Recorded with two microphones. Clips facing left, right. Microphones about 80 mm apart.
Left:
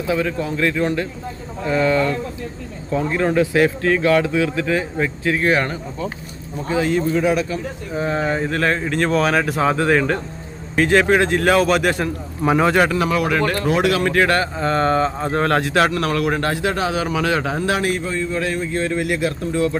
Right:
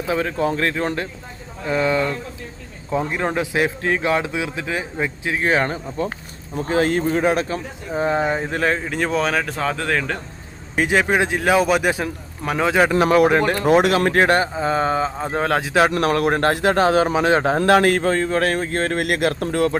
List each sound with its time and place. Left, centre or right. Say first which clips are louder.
0.1 s a man's voice: right 1 dB; right
1.7 s speech: left 2 dB; centre
6.0 s speech: right 2 dB; right; by 10.2 s centre
10.8 s speech: left 3 dB; centre
13.1 s speech: right 4 dB; right
13.7 s a man's voice: right 4 dB; right
14.5 s speech: left 2 dB; centre
16.0 s speech: right 2 dB; right
16.2 s a man's voice: right 2 dB; right
17.6 s speech: right 5 dB; right